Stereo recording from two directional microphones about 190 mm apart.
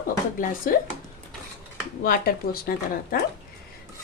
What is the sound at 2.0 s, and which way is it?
Speech, 50° left (ahead or behind).